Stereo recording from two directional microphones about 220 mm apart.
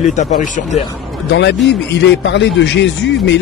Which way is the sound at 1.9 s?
55° left (ahead or behind).